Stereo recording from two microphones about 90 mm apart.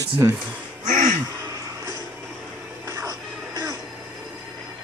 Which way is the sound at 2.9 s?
40° right (ahead or behind).